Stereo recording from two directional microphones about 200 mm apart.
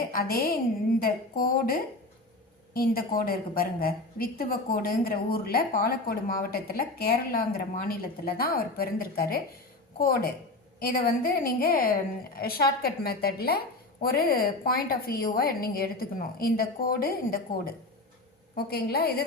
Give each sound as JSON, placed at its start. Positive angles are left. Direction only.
{"t": 0.1, "sound": "a woman's voice", "side_deg": 50}
{"t": 18.5, "sound": "a woman's voice", "side_deg": 50}